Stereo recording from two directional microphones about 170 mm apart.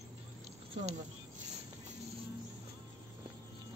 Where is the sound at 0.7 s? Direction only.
40° right (ahead or behind).